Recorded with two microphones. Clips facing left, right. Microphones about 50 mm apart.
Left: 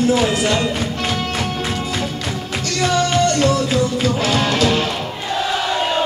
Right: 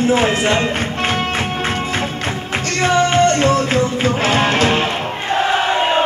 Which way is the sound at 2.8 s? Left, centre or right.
Right.